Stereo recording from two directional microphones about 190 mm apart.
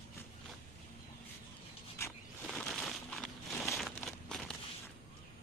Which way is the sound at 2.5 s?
Centre (ahead or behind).